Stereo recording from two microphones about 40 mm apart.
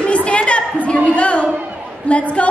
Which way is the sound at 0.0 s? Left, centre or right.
Left.